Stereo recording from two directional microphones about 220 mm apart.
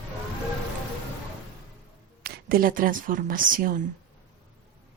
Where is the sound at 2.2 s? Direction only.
45° right (ahead or behind).